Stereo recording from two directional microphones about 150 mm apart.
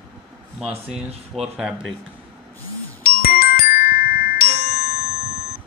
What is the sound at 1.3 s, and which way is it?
Speech, centre (ahead or behind).